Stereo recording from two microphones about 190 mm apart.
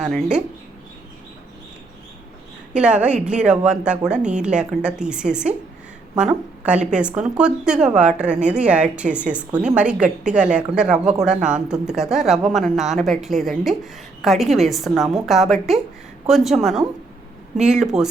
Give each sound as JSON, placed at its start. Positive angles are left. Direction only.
{"t": 0.1, "sound": "speech", "side_deg": -5}
{"t": 2.7, "sound": "speech", "side_deg": -5}